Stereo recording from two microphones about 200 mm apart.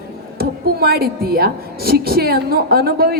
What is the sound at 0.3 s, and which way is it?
A woman's voice, 50° right (ahead or behind).